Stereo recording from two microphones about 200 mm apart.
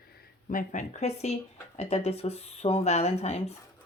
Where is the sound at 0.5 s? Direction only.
35° left (ahead or behind).